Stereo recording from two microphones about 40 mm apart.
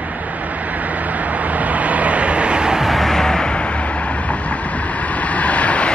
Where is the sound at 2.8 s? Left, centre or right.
Centre.